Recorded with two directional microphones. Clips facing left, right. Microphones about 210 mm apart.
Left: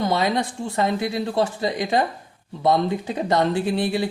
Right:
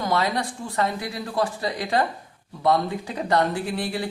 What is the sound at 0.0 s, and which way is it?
Speech, 20° left (ahead or behind).